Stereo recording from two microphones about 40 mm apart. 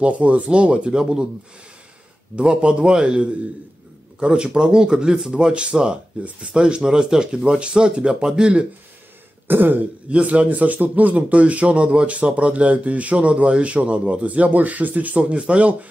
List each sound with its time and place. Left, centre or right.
0.0 s speech: right
2.3 s speech: right
9.5 s throat clearing: right
10.0 s speech: right